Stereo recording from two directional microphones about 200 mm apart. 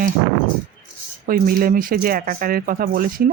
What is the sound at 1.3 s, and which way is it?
Speech, 45° right (ahead or behind).